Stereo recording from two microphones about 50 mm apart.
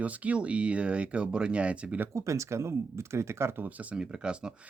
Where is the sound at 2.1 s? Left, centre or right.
Right.